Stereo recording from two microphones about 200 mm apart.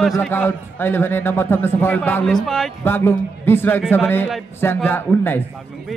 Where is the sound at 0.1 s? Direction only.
10° left (ahead or behind).